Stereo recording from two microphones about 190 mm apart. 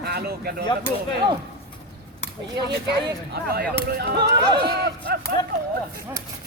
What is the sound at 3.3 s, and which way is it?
Speech, 55° right (ahead or behind).